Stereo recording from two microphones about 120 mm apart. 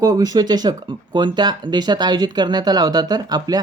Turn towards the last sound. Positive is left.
turn(degrees=-35)  # may be behind; listen again after turning